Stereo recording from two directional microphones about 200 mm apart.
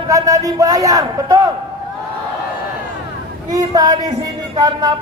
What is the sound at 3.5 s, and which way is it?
Speech, 20° right (ahead or behind).